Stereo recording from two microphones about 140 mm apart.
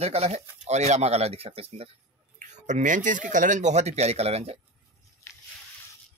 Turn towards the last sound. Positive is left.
turn(degrees=-45)  # may be behind; listen again after turning